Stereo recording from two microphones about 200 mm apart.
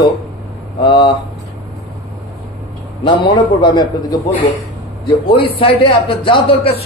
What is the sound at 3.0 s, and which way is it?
A man's voice, 25° left (ahead or behind).